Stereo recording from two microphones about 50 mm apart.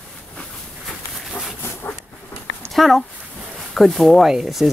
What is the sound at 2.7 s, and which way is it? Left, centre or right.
Speech, centre.